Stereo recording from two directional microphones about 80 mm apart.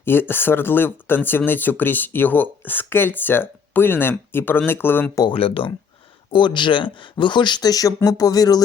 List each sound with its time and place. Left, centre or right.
0.0 s speech: left
6.3 s speech: left